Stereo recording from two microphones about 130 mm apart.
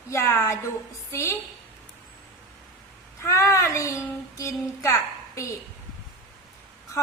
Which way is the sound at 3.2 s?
25° left (ahead or behind).